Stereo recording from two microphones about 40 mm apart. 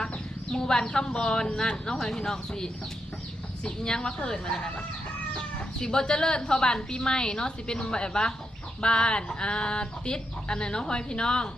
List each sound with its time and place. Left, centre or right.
0.5 s speech: centre
5.8 s speech: centre